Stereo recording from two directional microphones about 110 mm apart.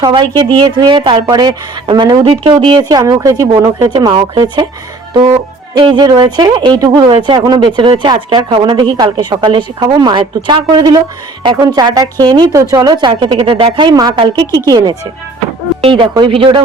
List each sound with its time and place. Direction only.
0.0 s speech: 45° right (ahead or behind)
3.0 s speech: 30° right (ahead or behind)
5.8 s speech: 40° right (ahead or behind)
8.4 s speech: 55° right (ahead or behind)
13.9 s speech: 40° right (ahead or behind)
15.8 s speech: 50° right (ahead or behind)